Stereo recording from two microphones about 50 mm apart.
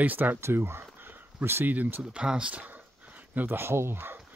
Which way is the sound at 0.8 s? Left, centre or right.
Right.